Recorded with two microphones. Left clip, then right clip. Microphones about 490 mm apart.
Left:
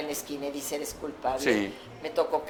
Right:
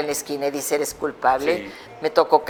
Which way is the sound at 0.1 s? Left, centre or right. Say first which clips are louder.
Right 10 dB; right.